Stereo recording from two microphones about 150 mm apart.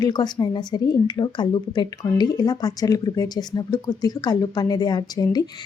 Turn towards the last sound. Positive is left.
turn(degrees=25)  # may be behind; listen again after turning